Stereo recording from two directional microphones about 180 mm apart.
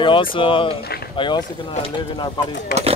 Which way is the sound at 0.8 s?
65° left (ahead or behind).